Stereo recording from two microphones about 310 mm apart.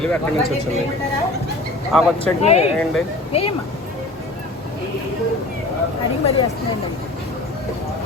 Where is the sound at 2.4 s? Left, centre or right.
Left.